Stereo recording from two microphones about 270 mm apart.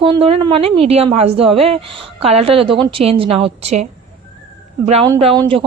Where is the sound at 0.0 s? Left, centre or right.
Centre.